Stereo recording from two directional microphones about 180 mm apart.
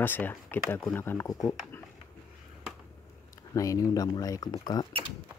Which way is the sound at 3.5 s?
20° left (ahead or behind).